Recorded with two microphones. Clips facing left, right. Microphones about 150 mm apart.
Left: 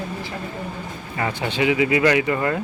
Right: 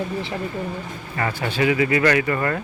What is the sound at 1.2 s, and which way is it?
Speech, 15° left (ahead or behind).